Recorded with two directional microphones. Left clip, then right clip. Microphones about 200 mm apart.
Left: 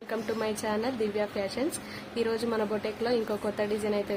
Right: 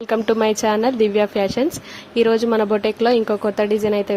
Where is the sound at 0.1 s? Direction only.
45° right (ahead or behind).